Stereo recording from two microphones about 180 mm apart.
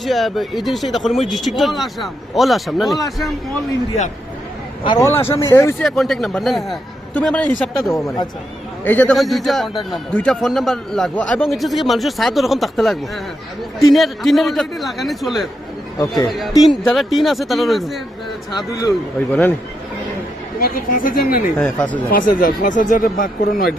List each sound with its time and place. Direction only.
0.0 s a man's voice: centre (ahead or behind)
4.8 s speech: 25° left (ahead or behind)
5.8 s a man's voice: centre (ahead or behind)
7.9 s a man's voice: 15° left (ahead or behind); by 15.4 s centre (ahead or behind)
16.0 s speech: 20° left (ahead or behind)
16.6 s a man's voice: centre (ahead or behind)
19.3 s speech: 10° left (ahead or behind)
20.6 s speech: 55° left (ahead or behind)
21.6 s speech: 5° left (ahead or behind)
22.1 s speech: 50° left (ahead or behind)